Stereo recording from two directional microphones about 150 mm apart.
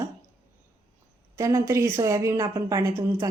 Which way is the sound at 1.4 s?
20° right (ahead or behind).